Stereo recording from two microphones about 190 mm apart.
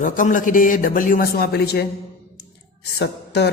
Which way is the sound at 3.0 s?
60° left (ahead or behind).